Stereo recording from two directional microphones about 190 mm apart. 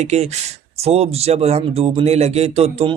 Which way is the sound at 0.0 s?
35° right (ahead or behind).